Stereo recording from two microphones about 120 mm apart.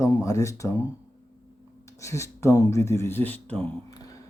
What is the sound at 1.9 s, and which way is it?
Speech, 25° left (ahead or behind).